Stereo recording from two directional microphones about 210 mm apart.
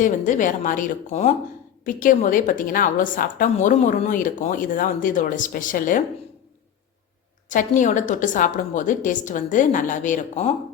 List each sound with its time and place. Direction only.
0.0 s a woman's voice: 35° left (ahead or behind)
7.5 s a woman's voice: 40° left (ahead or behind)